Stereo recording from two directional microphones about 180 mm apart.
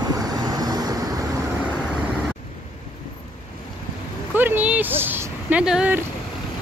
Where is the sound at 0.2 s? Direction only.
20° right (ahead or behind).